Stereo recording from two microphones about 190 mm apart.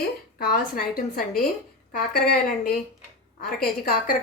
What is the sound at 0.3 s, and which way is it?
A woman's voice, 50° left (ahead or behind).